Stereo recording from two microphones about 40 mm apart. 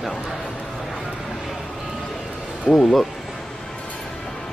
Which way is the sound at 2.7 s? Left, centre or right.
Centre.